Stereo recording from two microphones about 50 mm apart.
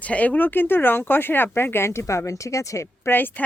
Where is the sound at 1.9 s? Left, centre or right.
Left.